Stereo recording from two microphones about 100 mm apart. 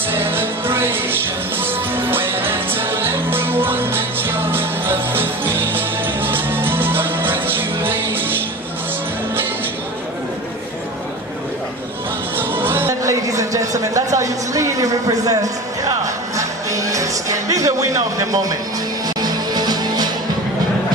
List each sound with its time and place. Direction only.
0.1 s music: 20° right (ahead or behind)
12.4 s music: 20° right (ahead or behind)
12.9 s a sound: 30° right (ahead or behind)
16.0 s music: 35° right (ahead or behind)